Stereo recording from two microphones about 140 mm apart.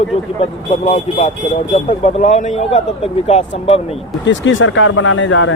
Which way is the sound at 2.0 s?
55° left (ahead or behind).